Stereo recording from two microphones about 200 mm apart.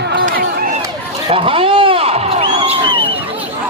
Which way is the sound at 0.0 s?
50° right (ahead or behind).